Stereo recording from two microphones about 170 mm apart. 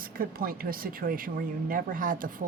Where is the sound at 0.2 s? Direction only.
60° right (ahead or behind).